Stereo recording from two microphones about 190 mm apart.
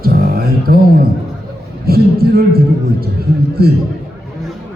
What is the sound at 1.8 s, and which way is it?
Speech, 55° right (ahead or behind).